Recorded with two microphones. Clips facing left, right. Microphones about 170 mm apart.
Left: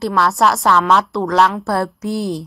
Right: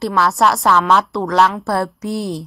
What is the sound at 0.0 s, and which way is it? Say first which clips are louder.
A woman's voice: even; centre (ahead or behind).